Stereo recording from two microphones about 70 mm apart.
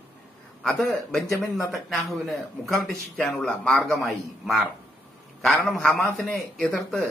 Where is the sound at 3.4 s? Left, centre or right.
Centre.